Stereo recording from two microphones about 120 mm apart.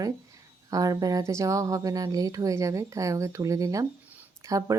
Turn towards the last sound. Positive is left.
turn(degrees=-30)  # may be behind; listen again after turning